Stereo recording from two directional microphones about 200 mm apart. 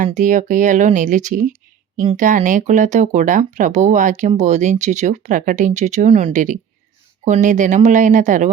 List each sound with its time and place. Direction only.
0.0 s speech: 40° right (ahead or behind)